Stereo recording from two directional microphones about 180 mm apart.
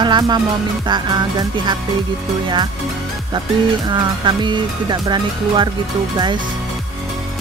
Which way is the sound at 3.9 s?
25° right (ahead or behind).